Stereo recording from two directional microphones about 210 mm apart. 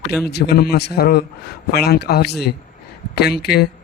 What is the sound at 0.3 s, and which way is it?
Speech, 50° left (ahead or behind).